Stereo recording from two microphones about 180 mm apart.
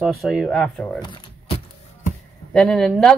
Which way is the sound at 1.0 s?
25° left (ahead or behind).